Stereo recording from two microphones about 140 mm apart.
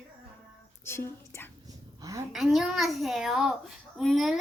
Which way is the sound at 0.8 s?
15° left (ahead or behind).